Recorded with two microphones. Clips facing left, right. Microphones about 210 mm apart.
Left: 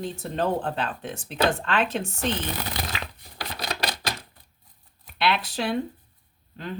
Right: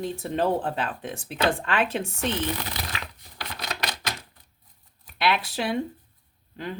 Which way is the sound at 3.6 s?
35° left (ahead or behind).